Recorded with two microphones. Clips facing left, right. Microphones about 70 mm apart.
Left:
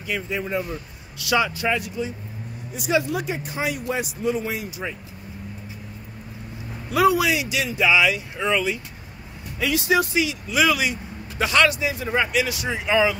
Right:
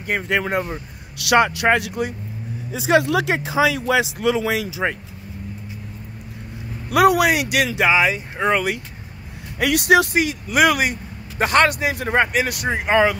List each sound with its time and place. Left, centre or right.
0.3 s speech: right
1.1 s speech: right
2.9 s speech: right
6.9 s speech: right
7.8 s speech: right
10.2 s speech: right